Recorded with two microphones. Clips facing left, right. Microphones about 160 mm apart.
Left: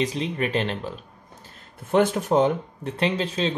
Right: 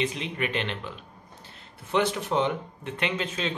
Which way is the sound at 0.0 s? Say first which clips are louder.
Left 4 dB; 35° left (ahead or behind).